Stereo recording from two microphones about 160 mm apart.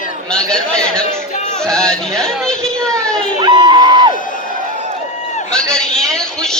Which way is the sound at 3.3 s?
30° right (ahead or behind).